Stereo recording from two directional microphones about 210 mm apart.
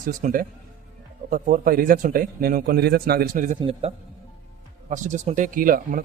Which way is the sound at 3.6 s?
25° right (ahead or behind).